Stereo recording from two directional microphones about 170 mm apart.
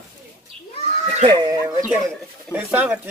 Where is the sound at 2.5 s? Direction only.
10° right (ahead or behind).